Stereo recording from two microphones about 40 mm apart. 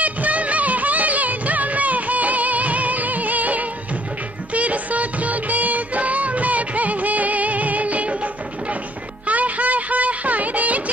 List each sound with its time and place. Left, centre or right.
0.0 s music of bollywood: right
4.6 s music: right
9.3 s a sound: right